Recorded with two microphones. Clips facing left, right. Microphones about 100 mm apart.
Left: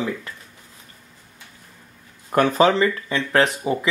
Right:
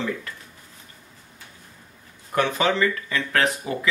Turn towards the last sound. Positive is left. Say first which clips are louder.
# left 4 dB
turn(degrees=25)  # may be behind; listen again after turning